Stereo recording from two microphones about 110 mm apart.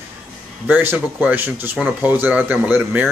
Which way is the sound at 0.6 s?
15° right (ahead or behind).